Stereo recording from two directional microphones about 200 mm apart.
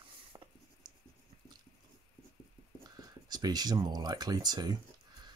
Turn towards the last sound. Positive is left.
turn(degrees=-20)  # may be behind; listen again after turning